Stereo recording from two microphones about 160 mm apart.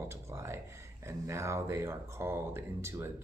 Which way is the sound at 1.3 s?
15° right (ahead or behind).